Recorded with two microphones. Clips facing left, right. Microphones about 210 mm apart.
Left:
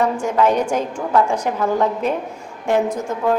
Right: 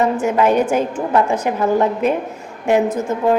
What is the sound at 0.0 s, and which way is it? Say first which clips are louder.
A woman's voice: right 2 dB; 5° right (ahead or behind).